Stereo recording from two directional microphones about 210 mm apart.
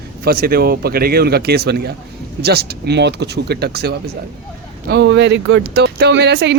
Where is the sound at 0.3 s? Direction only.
45° right (ahead or behind).